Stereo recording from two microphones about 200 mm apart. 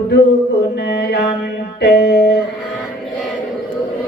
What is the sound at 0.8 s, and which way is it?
Mantra, 55° left (ahead or behind).